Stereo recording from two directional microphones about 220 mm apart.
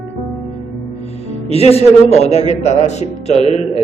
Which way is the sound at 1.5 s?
25° left (ahead or behind).